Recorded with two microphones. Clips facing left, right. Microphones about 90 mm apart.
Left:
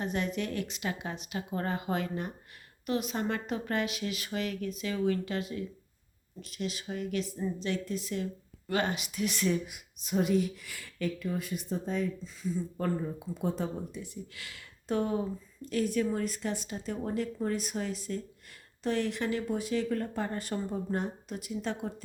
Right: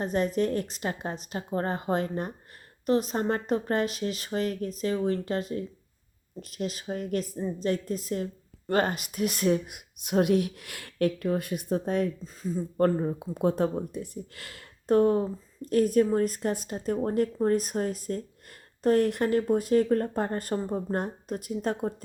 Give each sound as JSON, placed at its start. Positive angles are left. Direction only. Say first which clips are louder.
{"t": 0.0, "sound": "a woman's voice", "louder": "right 6 dB", "side_deg": -40}
{"t": 12.2, "sound": "a woman's voice", "louder": "right 2 dB", "side_deg": -40}